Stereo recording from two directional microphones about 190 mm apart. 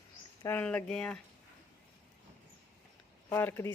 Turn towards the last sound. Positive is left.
turn(degrees=10)  # may be behind; listen again after turning